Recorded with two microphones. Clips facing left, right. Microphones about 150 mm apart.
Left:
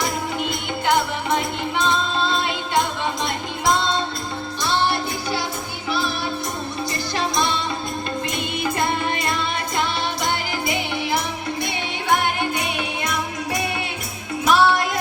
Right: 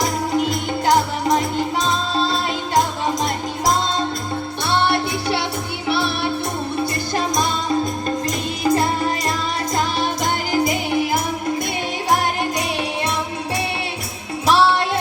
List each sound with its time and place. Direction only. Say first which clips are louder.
0.0 s music: right 5 dB; 40° right (ahead or behind)
4.6 s music: right 2 dB; 60° right (ahead or behind)
10.6 s music: right 6 dB; 45° right (ahead or behind)
14.4 s music: right 1 dB; 30° right (ahead or behind)